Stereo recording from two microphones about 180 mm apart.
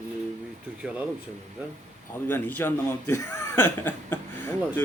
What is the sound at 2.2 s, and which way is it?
A man's voice, 10° left (ahead or behind).